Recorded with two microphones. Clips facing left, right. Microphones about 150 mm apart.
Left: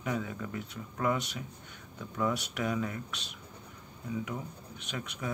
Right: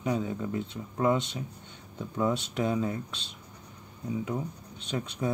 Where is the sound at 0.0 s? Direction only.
25° right (ahead or behind).